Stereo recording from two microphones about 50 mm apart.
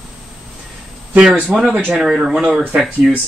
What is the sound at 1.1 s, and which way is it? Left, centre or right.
Speech, right.